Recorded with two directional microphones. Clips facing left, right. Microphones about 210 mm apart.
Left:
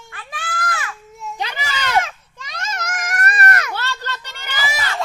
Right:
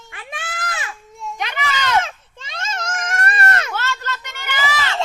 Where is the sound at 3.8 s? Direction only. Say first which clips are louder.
Right 2 dB; 35° left (ahead or behind).